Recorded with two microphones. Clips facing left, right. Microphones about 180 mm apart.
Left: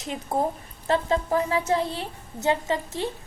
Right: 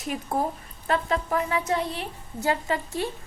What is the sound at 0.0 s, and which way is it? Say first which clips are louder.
A woman's voice: left 1 dB; 20° left (ahead or behind).